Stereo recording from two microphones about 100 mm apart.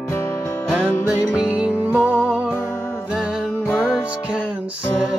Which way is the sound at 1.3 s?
10° right (ahead or behind).